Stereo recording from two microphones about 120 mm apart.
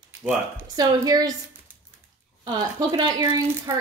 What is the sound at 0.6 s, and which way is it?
Speech, 35° right (ahead or behind).